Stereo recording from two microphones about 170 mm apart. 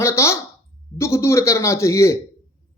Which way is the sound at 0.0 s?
15° left (ahead or behind).